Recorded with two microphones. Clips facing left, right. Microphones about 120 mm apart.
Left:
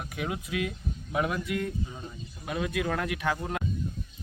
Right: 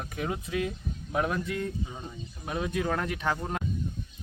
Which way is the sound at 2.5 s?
Centre (ahead or behind).